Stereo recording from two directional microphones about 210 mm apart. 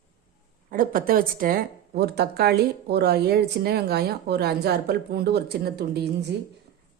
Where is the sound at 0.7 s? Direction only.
40° right (ahead or behind).